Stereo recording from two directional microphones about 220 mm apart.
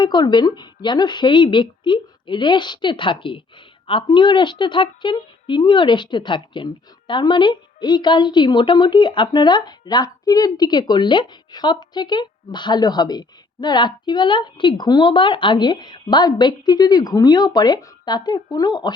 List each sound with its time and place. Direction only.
0.0 s speech: 20° left (ahead or behind)